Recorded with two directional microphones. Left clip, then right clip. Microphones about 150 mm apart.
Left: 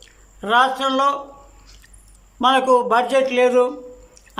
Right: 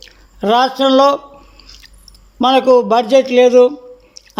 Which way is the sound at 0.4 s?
25° right (ahead or behind).